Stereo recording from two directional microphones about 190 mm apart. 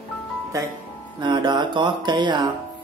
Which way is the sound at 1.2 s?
25° right (ahead or behind).